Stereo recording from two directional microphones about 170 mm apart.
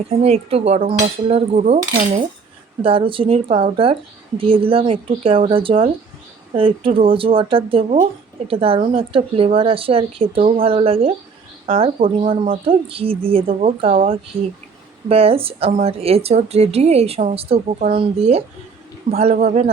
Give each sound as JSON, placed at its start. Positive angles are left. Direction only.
{"t": 0.1, "sound": "a woman's voice", "side_deg": -35}
{"t": 14.3, "sound": "speech", "side_deg": -60}
{"t": 15.1, "sound": "a woman's voice", "side_deg": -35}